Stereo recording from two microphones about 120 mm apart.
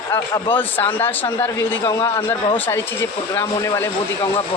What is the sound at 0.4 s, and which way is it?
A man's voice, 15° left (ahead or behind).